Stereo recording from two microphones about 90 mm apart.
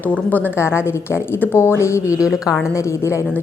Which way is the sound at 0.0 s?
20° left (ahead or behind).